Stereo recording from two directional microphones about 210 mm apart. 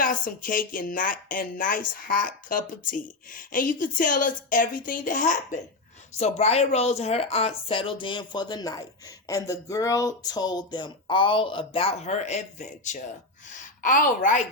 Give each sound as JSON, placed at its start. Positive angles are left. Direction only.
{"t": 0.0, "sound": "speech", "side_deg": 40}